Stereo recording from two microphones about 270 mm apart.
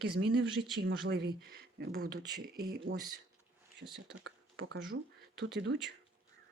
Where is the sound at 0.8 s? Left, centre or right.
Right.